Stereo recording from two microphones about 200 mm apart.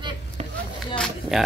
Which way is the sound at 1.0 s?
Centre (ahead or behind).